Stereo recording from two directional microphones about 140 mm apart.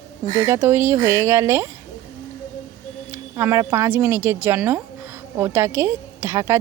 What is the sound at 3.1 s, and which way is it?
Speech, 20° right (ahead or behind).